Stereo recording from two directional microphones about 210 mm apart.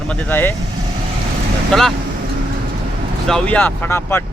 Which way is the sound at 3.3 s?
5° left (ahead or behind).